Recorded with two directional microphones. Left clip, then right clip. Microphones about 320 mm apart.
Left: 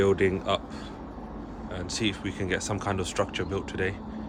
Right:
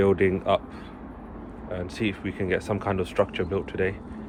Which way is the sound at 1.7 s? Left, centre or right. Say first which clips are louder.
Right 1 dB; centre.